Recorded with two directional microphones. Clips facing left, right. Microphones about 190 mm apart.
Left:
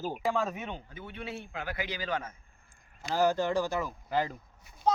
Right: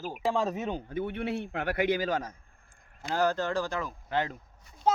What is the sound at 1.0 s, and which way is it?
A man's voice, 60° right (ahead or behind).